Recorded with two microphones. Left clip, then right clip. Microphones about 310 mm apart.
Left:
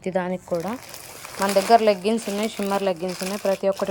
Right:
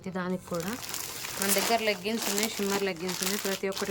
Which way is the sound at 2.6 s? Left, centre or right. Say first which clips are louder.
Left 7 dB; left.